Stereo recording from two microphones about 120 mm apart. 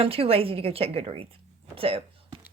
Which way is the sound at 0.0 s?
55° right (ahead or behind).